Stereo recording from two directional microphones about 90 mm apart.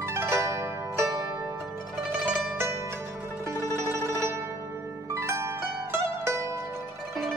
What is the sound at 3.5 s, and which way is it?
Zither, 30° right (ahead or behind).